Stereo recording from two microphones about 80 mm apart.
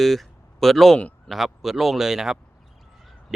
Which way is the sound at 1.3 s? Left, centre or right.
Centre.